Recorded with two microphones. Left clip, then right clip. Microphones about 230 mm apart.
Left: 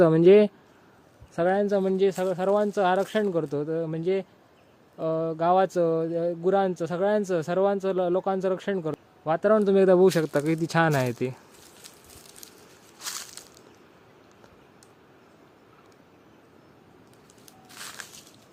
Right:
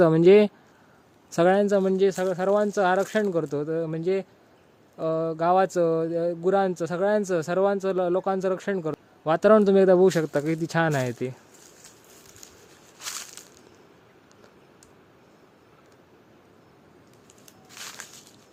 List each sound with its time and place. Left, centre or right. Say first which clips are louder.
0.0 s speech: even; centre
1.3 s speech: right 4 dB; right
1.6 s speech: right 2 dB; right; by 9.0 s centre
9.2 s a man's voice: right 4 dB; right
9.6 s speech: right 1 dB; centre
13.0 s crushing: even; centre